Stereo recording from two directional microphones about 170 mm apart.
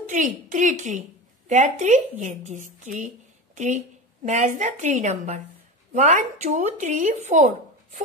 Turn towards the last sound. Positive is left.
turn(degrees=-45)  # may be behind; listen again after turning